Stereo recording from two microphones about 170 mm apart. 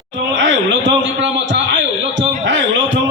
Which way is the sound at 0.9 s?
90° right.